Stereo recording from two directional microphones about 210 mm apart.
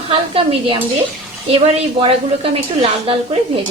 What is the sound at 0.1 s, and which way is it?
Speech, 25° right (ahead or behind).